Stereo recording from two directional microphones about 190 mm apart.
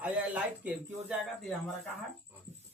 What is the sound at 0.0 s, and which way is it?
Speech, 5° right (ahead or behind).